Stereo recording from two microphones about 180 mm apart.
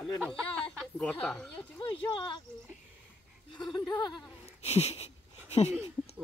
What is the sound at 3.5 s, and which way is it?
Speech, 25° left (ahead or behind).